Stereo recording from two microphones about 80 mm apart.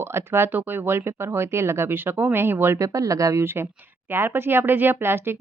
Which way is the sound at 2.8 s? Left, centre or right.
Right.